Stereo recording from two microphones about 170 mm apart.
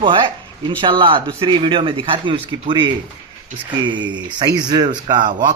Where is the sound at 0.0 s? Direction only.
30° right (ahead or behind).